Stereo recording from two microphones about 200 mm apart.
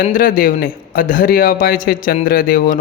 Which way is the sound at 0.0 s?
45° left (ahead or behind).